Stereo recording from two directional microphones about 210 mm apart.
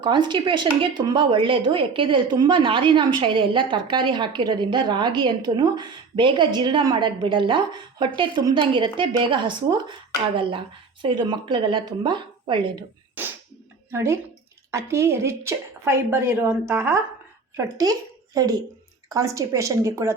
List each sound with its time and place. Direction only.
0.0 s a woman's voice: 20° right (ahead or behind)
11.0 s a woman's voice: 20° right (ahead or behind)
13.2 s a sound: 10° right (ahead or behind)
13.9 s a woman's voice: 15° right (ahead or behind)
19.0 s a woman's voice: 15° right (ahead or behind)